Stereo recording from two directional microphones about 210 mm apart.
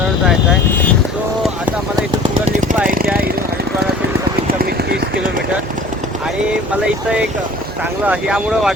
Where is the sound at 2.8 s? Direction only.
45° right (ahead or behind).